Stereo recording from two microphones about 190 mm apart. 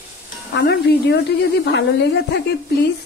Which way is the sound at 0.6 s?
55° left (ahead or behind).